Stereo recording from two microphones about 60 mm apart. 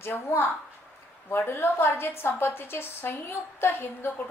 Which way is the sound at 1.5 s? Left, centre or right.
Left.